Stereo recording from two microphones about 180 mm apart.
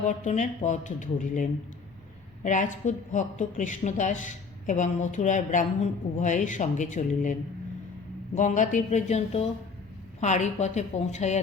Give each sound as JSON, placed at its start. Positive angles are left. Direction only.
{"t": 0.0, "sound": "a woman's voice", "side_deg": 45}
{"t": 8.4, "sound": "a woman's voice", "side_deg": 45}